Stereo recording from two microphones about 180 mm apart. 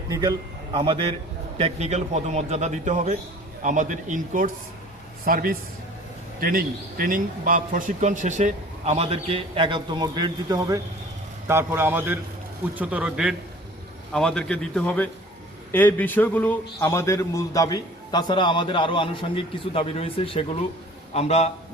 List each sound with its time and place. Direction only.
0.1 s a man's voice: 25° right (ahead or behind); by 21.5 s 35° left (ahead or behind)